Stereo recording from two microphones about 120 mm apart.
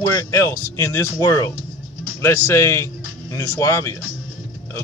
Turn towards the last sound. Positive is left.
turn(degrees=25)  # may be behind; listen again after turning